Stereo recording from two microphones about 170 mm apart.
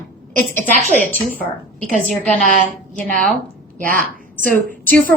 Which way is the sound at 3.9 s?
55° right (ahead or behind).